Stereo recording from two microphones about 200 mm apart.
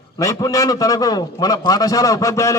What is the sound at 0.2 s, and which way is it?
A man's voice, 15° left (ahead or behind).